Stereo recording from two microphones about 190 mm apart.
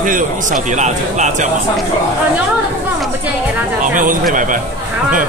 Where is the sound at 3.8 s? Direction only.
45° right (ahead or behind).